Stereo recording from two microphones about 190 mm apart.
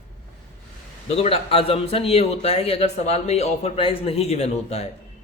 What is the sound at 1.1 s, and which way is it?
A man's voice, 30° left (ahead or behind).